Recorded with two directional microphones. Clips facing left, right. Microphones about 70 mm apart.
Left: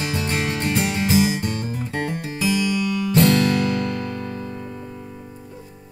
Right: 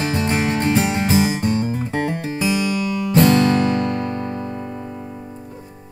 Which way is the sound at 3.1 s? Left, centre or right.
Right.